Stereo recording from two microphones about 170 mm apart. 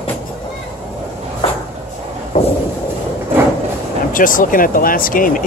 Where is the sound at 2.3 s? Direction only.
45° left (ahead or behind).